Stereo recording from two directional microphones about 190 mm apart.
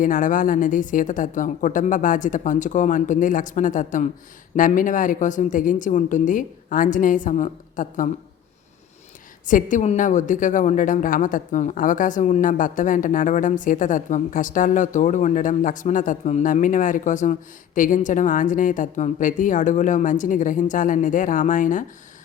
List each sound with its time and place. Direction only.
0.0 s a woman's voice: 45° left (ahead or behind)
9.5 s a woman's voice: 40° left (ahead or behind)